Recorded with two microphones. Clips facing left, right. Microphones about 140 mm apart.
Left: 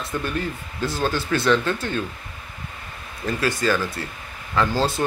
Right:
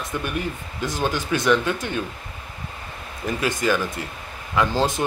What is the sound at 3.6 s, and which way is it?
Speech, 15° right (ahead or behind).